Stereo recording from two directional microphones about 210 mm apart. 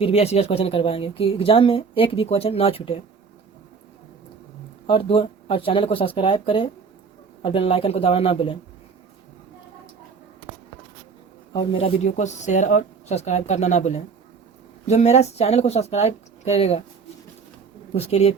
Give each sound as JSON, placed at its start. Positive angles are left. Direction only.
{"t": 0.0, "sound": "speech", "side_deg": 30}
{"t": 4.9, "sound": "speech", "side_deg": 25}
{"t": 11.5, "sound": "speech", "side_deg": 25}
{"t": 17.9, "sound": "speech", "side_deg": 30}